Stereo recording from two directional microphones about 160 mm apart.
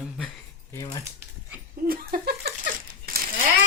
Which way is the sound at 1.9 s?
70° right (ahead or behind).